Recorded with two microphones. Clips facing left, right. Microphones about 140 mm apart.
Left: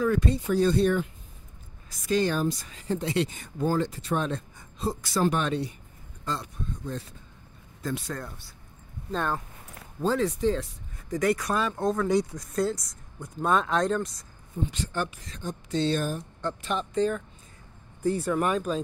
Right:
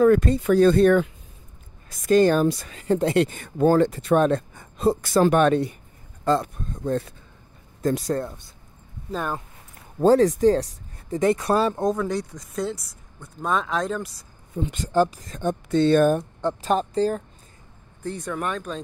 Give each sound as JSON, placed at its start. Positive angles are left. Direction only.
{"t": 0.0, "sound": "speech", "side_deg": -50}
{"t": 0.4, "sound": "speech", "side_deg": -60}
{"t": 2.4, "sound": "speech", "side_deg": -60}
{"t": 7.8, "sound": "speech", "side_deg": -40}
{"t": 9.1, "sound": "speech", "side_deg": -10}
{"t": 9.9, "sound": "speech", "side_deg": -40}
{"t": 11.1, "sound": "speech", "side_deg": -25}
{"t": 11.7, "sound": "speech", "side_deg": -15}
{"t": 12.1, "sound": "speech", "side_deg": 15}
{"t": 12.4, "sound": "speech", "side_deg": 0}
{"t": 14.7, "sound": "speech", "side_deg": -45}
{"t": 15.4, "sound": "speech", "side_deg": -55}
{"t": 16.6, "sound": "speech", "side_deg": -35}
{"t": 18.0, "sound": "speech", "side_deg": 5}